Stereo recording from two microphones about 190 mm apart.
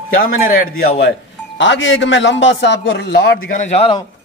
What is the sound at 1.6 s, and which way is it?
Speech, 80° left.